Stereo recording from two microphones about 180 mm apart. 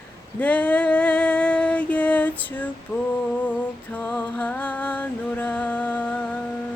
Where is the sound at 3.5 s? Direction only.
10° left (ahead or behind).